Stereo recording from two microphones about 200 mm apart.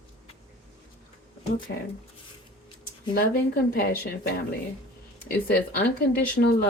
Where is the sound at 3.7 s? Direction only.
50° left (ahead or behind).